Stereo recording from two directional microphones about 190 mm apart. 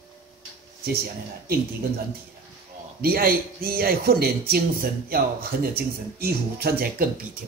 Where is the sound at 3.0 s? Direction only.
50° right (ahead or behind).